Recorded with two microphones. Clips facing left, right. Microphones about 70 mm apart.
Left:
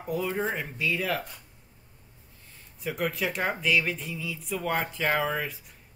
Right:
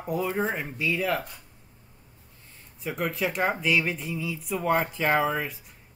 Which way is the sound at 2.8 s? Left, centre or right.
Centre.